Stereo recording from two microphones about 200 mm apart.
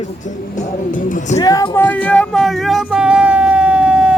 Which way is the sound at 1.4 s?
20° left (ahead or behind).